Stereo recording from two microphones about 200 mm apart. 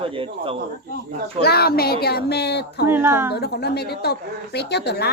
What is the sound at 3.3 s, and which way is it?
Speech, 55° left (ahead or behind).